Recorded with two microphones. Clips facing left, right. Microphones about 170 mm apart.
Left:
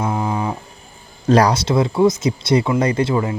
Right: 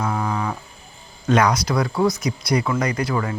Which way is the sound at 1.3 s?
35° left (ahead or behind).